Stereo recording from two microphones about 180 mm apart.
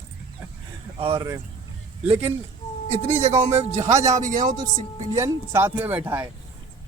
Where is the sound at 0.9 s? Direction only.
30° right (ahead or behind).